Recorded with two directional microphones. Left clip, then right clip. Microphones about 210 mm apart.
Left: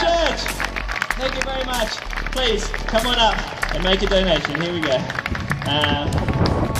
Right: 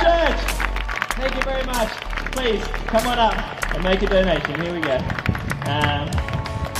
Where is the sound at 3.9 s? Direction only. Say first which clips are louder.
Even; 50° left (ahead or behind).